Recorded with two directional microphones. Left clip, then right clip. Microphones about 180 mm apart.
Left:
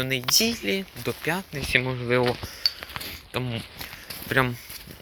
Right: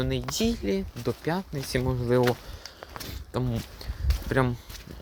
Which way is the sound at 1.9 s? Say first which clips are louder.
Left 1 dB; 10° right (ahead or behind).